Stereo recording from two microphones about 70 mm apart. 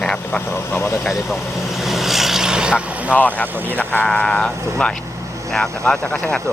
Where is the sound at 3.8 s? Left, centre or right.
Left.